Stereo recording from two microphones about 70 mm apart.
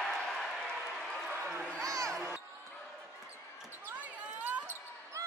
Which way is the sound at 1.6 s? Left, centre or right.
Centre.